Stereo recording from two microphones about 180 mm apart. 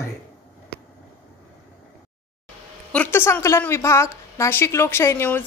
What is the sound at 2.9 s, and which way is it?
A woman's voice, 10° left (ahead or behind).